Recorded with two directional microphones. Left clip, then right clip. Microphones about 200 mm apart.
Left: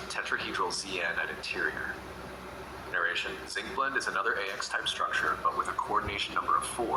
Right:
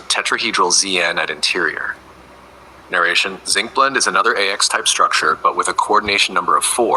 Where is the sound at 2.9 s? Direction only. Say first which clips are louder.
Right 15 dB; 50° right (ahead or behind).